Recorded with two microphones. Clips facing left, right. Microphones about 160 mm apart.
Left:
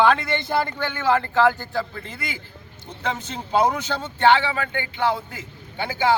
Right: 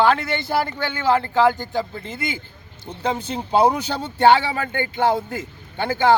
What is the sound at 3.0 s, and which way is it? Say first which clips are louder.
A man's voice: right 4 dB; 30° right (ahead or behind).